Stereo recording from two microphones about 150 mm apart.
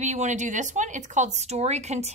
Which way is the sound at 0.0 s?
50° right (ahead or behind).